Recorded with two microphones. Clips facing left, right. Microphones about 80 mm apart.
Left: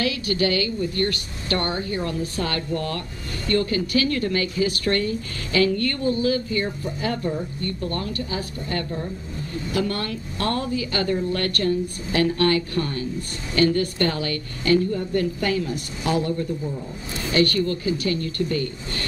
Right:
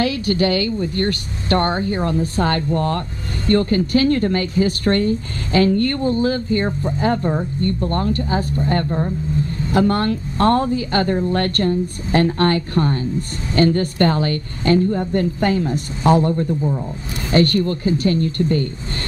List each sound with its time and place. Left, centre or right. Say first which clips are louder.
0.0 s speech: right 5 dB; right